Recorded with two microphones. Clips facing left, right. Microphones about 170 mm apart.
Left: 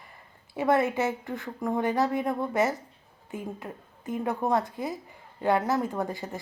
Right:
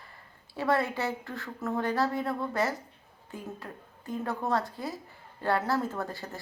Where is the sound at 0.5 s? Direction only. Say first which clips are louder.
Left 4 dB; 20° left (ahead or behind).